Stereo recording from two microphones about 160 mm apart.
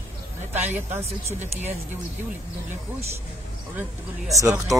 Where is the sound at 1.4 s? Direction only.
45° right (ahead or behind).